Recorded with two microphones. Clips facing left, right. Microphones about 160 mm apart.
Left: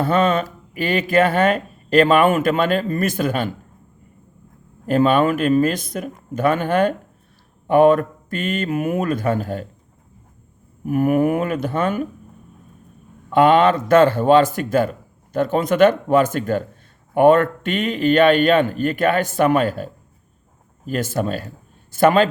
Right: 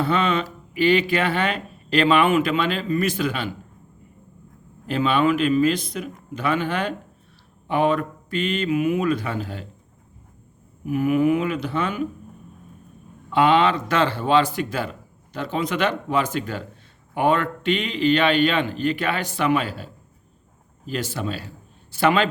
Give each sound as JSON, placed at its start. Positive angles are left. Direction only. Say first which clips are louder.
{"t": 0.0, "sound": "speech", "louder": "left 4 dB", "side_deg": 45}
{"t": 4.9, "sound": "speech", "louder": "left 4 dB", "side_deg": 45}
{"t": 10.8, "sound": "speech", "louder": "left 2 dB", "side_deg": 50}
{"t": 13.3, "sound": "speech", "louder": "left 4 dB", "side_deg": 50}